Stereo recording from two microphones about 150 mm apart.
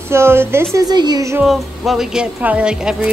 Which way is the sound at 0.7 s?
25° right (ahead or behind).